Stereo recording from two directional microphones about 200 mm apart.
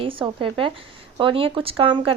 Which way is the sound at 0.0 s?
25° right (ahead or behind).